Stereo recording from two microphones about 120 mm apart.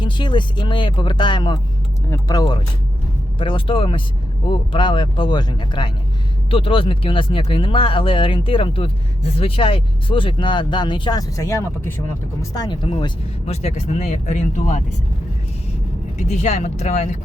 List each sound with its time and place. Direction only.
0.0 s speech: 40° left (ahead or behind)
2.0 s speech: 30° left (ahead or behind)
3.3 s speech: 45° left (ahead or behind); by 12.5 s 20° left (ahead or behind)
12.5 s speech: 35° left (ahead or behind)
13.4 s speech: 65° left (ahead or behind)
16.2 s speech: 70° left (ahead or behind)